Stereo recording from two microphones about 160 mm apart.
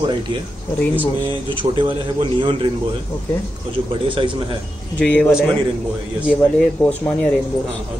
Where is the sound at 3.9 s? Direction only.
30° right (ahead or behind).